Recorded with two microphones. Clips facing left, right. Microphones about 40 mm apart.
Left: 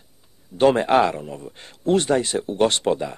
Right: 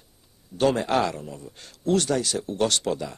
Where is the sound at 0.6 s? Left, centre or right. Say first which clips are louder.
Left 6 dB; left.